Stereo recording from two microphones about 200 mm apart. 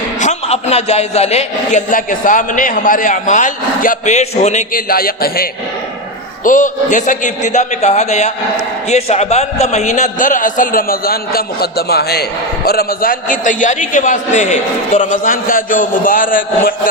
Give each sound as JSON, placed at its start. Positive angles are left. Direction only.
{"t": 0.2, "sound": "a man's voice", "side_deg": 35}